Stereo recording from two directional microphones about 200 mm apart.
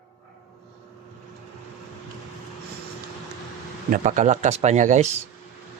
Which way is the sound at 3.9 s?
40° right (ahead or behind).